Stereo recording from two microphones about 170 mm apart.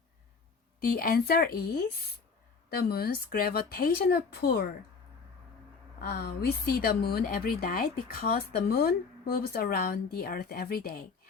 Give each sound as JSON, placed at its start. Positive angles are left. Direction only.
{"t": 0.8, "sound": "a woman's voice", "side_deg": 60}
{"t": 6.0, "sound": "a woman's voice", "side_deg": 65}